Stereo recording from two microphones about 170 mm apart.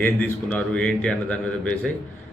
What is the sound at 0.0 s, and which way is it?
A man's voice, 10° left (ahead or behind).